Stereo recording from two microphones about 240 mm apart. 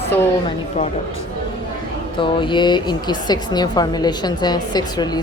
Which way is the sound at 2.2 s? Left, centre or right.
Centre.